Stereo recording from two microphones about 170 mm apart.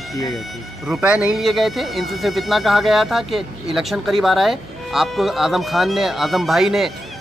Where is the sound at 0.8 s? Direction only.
5° right (ahead or behind).